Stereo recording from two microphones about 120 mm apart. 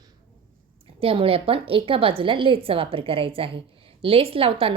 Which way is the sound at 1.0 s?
50° right (ahead or behind).